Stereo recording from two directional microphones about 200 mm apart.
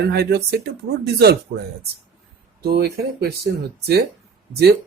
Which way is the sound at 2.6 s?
50° right (ahead or behind).